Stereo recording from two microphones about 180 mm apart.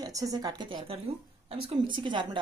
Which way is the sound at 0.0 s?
20° right (ahead or behind).